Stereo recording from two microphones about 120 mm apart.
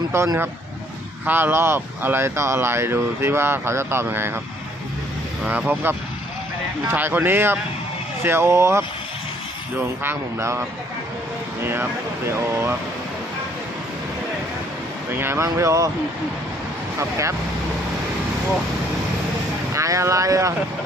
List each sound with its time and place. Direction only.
0.1 s speech: 20° right (ahead or behind)
5.5 s a man's voice: 15° right (ahead or behind)
11.6 s speech: 20° right (ahead or behind)
15.1 s speech: 20° right (ahead or behind)
17.0 s speech: 25° right (ahead or behind)
19.7 s speech: 25° right (ahead or behind)